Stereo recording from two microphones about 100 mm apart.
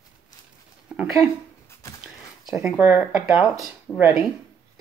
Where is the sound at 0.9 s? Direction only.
10° right (ahead or behind).